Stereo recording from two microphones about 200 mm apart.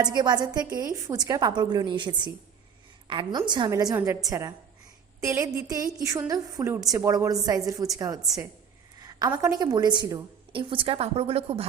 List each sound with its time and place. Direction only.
0.0 s a woman's voice: 20° right (ahead or behind)
9.0 s a sound: 20° right (ahead or behind)
9.3 s a woman's voice: 15° right (ahead or behind)